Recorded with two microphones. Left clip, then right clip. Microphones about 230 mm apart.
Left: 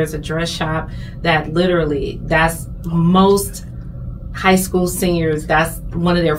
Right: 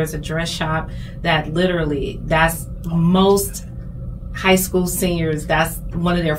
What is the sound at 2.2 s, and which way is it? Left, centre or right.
A woman's voice, centre.